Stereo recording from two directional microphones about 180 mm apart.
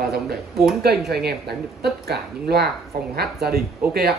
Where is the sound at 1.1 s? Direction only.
60° right (ahead or behind).